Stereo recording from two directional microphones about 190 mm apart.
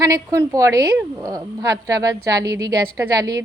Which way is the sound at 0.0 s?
20° right (ahead or behind).